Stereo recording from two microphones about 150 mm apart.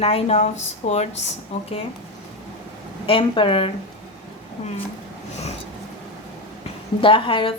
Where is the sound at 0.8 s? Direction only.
55° left (ahead or behind).